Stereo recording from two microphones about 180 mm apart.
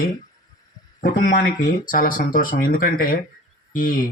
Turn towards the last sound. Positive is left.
turn(degrees=50)  # may be behind; listen again after turning